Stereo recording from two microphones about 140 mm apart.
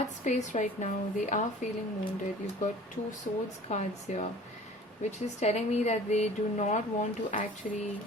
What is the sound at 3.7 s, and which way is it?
A woman's voice, 55° left (ahead or behind).